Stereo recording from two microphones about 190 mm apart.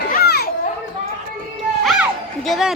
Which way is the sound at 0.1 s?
55° left (ahead or behind).